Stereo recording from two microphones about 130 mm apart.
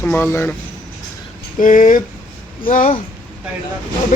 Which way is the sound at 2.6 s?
65° left (ahead or behind).